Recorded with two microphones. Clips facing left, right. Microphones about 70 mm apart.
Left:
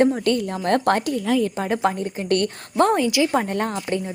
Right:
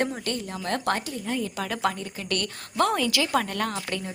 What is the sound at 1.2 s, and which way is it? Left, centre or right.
Speech, left.